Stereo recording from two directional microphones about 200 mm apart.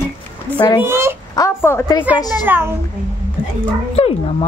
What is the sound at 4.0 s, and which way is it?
Dog, 30° left (ahead or behind).